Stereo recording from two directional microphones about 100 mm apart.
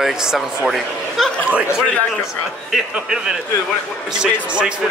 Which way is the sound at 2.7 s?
5° right (ahead or behind).